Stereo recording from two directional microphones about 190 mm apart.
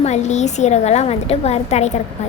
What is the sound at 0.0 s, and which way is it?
A woman's voice, 35° left (ahead or behind).